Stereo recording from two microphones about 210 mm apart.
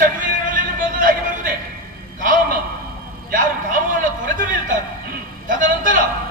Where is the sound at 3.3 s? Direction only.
40° right (ahead or behind).